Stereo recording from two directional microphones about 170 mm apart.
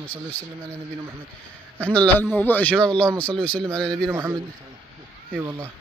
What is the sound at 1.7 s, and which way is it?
A man's voice, 10° left (ahead or behind).